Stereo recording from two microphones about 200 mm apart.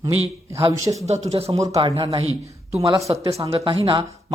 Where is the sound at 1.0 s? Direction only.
30° right (ahead or behind).